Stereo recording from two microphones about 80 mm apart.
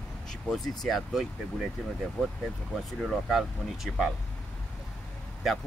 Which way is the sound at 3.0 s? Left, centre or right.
Centre.